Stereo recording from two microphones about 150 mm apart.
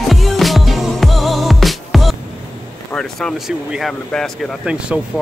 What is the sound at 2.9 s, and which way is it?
Speech, 5° left (ahead or behind).